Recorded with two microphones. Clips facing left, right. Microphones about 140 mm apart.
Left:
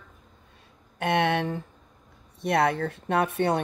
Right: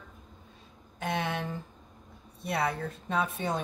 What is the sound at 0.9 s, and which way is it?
Speech, 70° left (ahead or behind).